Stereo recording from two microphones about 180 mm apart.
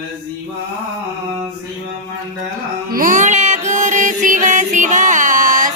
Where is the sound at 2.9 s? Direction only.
50° right (ahead or behind).